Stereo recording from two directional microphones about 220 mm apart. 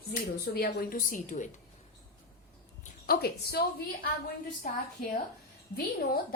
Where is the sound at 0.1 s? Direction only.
45° left (ahead or behind).